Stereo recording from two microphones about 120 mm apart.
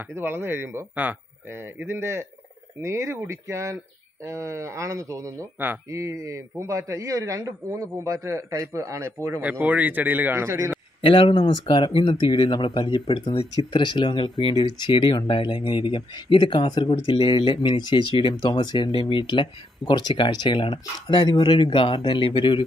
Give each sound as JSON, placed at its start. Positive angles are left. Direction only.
{"t": 0.1, "sound": "a man's voice", "side_deg": -20}
{"t": 9.4, "sound": "a man's voice", "side_deg": -10}
{"t": 11.0, "sound": "speech", "side_deg": 45}